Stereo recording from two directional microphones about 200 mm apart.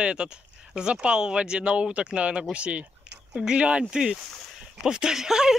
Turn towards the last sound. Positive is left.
turn(degrees=-5)  # may be behind; listen again after turning